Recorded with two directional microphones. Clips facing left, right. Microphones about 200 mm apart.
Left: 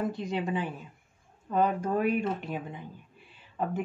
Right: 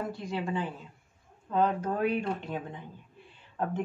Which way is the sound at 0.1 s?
20° left (ahead or behind).